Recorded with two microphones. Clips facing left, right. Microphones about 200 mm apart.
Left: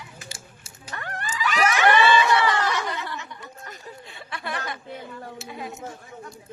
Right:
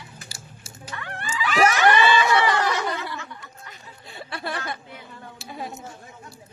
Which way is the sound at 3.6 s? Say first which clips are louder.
Left 5 dB; 45° left (ahead or behind).